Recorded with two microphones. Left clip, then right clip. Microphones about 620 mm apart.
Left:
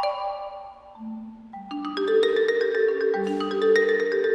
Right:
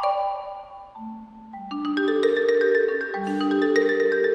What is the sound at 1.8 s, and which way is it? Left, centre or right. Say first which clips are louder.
Music: even; left.